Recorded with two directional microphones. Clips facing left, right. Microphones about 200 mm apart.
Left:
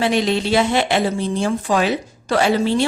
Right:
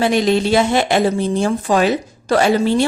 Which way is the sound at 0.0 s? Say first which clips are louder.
Right 3 dB; 45° right (ahead or behind).